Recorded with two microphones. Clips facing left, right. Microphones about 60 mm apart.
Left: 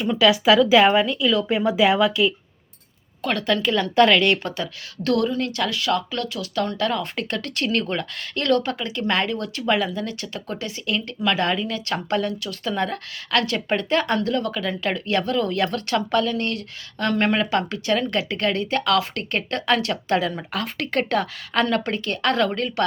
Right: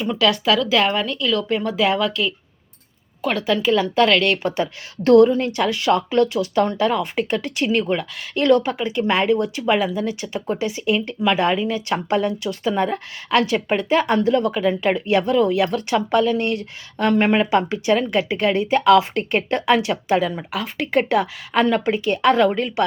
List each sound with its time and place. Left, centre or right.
0.0 s a woman's voice: centre
3.2 s a woman's voice: centre
4.4 s speech: right